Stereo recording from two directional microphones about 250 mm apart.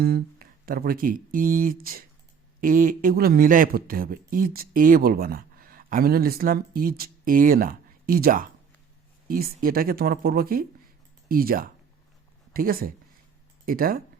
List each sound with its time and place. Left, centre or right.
0.0 s speech: right